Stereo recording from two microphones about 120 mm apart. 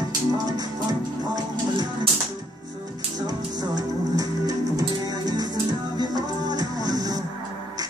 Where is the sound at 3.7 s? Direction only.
30° right (ahead or behind).